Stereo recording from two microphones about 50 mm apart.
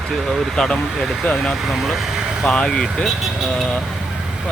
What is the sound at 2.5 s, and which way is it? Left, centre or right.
Speech, centre.